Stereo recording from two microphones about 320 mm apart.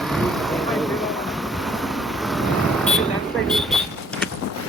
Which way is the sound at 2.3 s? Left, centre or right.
Centre.